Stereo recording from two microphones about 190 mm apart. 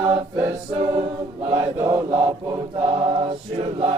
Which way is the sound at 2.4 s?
20° right (ahead or behind).